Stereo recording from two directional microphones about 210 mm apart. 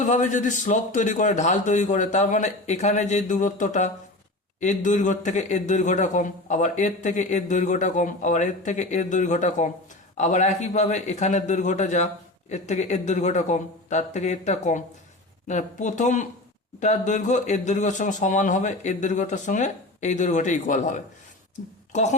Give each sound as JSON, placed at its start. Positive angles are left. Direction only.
{"t": 0.0, "sound": "a man's voice", "side_deg": 35}